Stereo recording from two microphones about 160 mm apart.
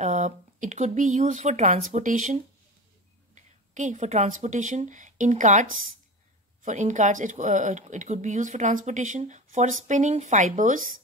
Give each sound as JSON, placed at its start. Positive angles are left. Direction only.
{"t": 0.0, "sound": "speech", "side_deg": -50}